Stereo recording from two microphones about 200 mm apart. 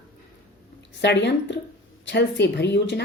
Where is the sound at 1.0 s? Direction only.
60° left (ahead or behind).